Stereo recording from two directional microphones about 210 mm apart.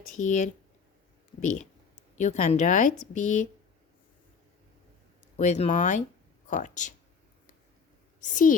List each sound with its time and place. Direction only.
0.2 s speech: 35° left (ahead or behind)
5.4 s speech: 35° left (ahead or behind)
8.2 s speech: 40° left (ahead or behind)